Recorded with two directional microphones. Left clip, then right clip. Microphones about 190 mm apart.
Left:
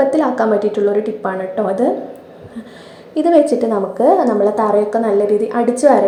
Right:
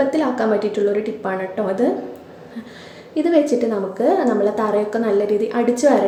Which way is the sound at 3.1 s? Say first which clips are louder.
Left 5 dB; centre (ahead or behind).